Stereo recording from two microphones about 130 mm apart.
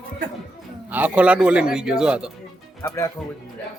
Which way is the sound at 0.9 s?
15° right (ahead or behind).